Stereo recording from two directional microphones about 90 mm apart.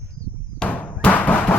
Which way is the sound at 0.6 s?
15° left (ahead or behind).